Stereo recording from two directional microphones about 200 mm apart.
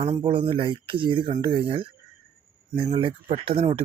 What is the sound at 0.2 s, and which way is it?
Speech, 25° right (ahead or behind).